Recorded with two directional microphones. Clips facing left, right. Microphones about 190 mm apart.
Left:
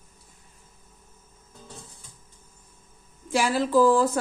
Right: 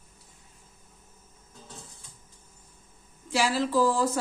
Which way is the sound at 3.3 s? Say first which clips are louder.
Left 3 dB; 50° left (ahead or behind).